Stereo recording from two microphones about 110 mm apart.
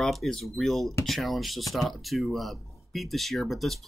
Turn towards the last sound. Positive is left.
turn(degrees=0)  # may be behind; listen again after turning